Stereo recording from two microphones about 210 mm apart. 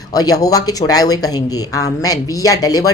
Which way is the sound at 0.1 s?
15° left (ahead or behind).